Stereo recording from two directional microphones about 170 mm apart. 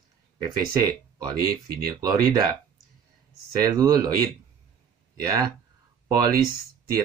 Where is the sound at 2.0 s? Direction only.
20° right (ahead or behind).